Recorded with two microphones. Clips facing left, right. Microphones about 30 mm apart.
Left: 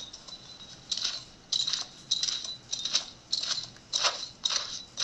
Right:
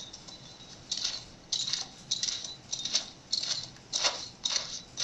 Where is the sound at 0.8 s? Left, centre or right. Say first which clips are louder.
Left 2 dB; centre.